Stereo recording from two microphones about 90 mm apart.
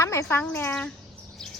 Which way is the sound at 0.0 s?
30° left (ahead or behind).